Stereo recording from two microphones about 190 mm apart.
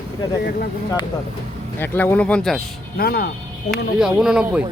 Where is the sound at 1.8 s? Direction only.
10° left (ahead or behind).